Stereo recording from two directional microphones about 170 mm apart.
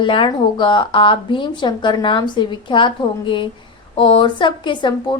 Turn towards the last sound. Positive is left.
turn(degrees=25)  # may be behind; listen again after turning